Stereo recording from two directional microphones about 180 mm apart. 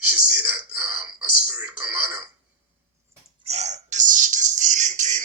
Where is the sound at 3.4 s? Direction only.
35° right (ahead or behind).